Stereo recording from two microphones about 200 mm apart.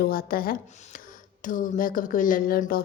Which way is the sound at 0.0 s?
50° left (ahead or behind).